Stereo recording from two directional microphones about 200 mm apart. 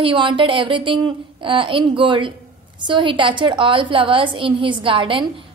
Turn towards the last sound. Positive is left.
turn(degrees=-25)  # may be behind; listen again after turning